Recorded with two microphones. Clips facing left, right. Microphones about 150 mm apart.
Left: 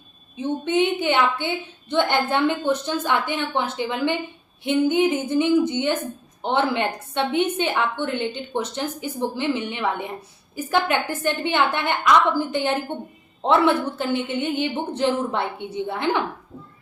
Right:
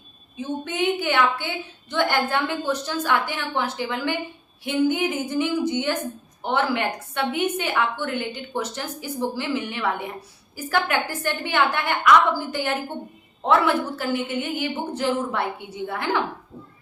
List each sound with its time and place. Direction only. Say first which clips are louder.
0.3 s a woman's voice: left 5 dB; 25° left (ahead or behind)